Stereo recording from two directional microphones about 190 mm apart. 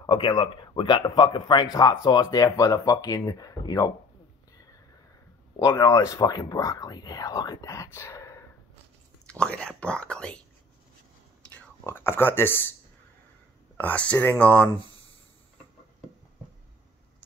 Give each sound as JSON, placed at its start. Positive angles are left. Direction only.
{"t": 0.0, "sound": "speech", "side_deg": 25}
{"t": 5.6, "sound": "speech", "side_deg": 15}
{"t": 11.6, "sound": "speech", "side_deg": 10}
{"t": 13.7, "sound": "speech", "side_deg": 5}